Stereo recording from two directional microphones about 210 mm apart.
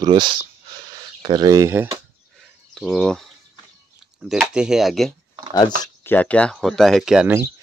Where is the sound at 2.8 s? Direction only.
Centre (ahead or behind).